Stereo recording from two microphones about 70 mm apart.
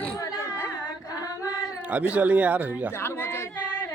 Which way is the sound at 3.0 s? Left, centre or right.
Left.